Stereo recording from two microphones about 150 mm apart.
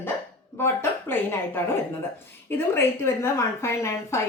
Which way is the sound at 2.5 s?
15° left (ahead or behind).